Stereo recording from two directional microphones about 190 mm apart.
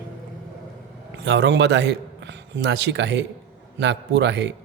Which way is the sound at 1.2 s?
65° right (ahead or behind).